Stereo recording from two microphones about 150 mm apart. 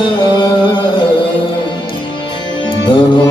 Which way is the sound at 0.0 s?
30° left (ahead or behind).